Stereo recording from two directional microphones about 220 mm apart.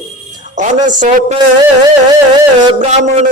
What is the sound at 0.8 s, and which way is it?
Speech, 35° right (ahead or behind).